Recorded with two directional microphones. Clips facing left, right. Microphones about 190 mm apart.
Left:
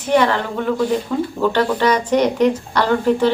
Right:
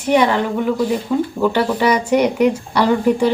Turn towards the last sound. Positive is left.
turn(degrees=-10)  # may be behind; listen again after turning